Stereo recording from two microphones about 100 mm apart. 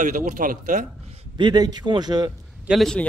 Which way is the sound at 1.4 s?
45° right (ahead or behind).